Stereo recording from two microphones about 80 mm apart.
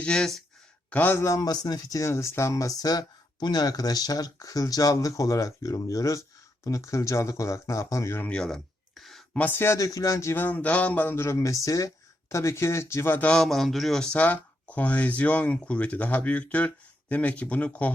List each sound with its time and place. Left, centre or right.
0.0 s speech: centre
0.9 s a man's voice: left
1.1 s a man's voice: left
1.4 s a man's voice: left
8.3 s a sound: centre
9.5 s a man's voice: left
9.7 s a man's voice: left
13.1 s speech: centre
13.4 s speech: centre